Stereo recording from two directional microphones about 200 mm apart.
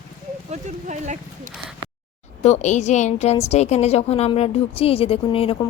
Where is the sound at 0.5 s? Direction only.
35° right (ahead or behind).